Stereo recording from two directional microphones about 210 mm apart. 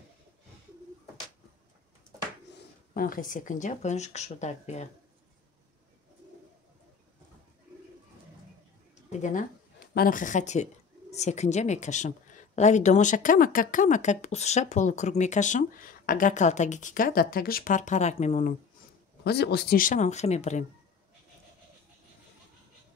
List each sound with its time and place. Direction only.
2.9 s speech: 45° left (ahead or behind)
9.2 s speech: 40° left (ahead or behind)
19.2 s speech: 50° left (ahead or behind); by 20.6 s 30° left (ahead or behind)